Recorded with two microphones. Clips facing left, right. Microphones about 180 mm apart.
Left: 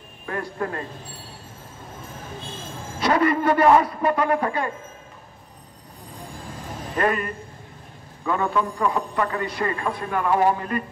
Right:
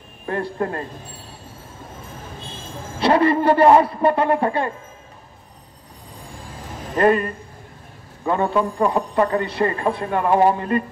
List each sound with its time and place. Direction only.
0.3 s a man's voice: 30° right (ahead or behind)
3.0 s a man's voice: 30° right (ahead or behind)
7.0 s a man's voice: 30° right (ahead or behind)